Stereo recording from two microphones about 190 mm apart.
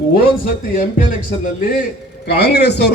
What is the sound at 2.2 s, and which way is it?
Speech, 60° left (ahead or behind).